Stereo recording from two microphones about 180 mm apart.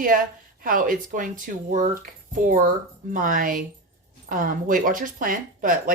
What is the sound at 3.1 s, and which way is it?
A woman's voice, 50° right (ahead or behind).